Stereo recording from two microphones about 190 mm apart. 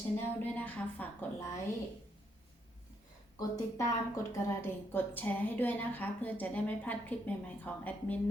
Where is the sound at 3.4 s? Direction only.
15° left (ahead or behind).